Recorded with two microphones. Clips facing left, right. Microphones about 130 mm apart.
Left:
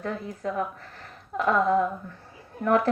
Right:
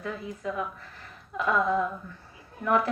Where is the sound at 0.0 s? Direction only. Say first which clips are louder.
Left 3 dB; 45° left (ahead or behind).